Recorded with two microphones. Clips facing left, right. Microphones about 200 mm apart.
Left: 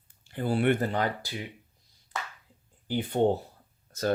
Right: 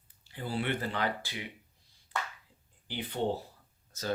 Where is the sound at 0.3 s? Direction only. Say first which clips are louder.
Left 8 dB; 50° left (ahead or behind).